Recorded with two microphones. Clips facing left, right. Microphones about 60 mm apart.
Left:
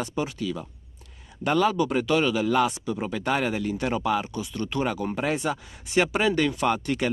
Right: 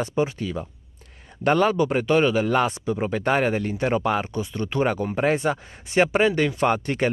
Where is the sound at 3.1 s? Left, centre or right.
Right.